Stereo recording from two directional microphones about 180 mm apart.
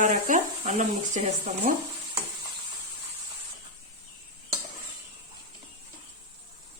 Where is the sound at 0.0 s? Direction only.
45° right (ahead or behind).